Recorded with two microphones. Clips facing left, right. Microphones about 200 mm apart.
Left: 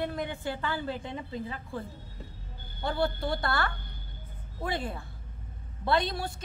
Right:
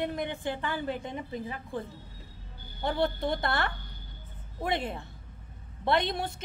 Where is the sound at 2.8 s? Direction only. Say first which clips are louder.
Right 1 dB; 20° right (ahead or behind).